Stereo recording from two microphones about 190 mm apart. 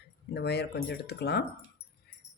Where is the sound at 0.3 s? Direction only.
60° left (ahead or behind).